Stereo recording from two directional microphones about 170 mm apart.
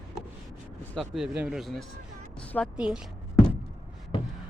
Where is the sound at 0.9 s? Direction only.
Centre (ahead or behind).